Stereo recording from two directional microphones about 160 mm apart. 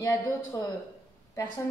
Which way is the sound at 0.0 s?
20° left (ahead or behind).